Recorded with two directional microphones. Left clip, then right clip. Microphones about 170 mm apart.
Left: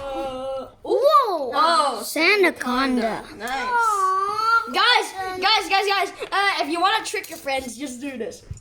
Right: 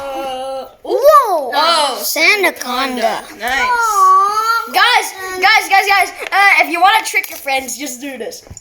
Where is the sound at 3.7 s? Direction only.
5° left (ahead or behind).